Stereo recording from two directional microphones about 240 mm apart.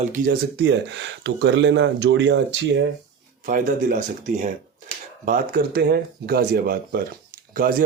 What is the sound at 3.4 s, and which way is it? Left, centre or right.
Speech, right.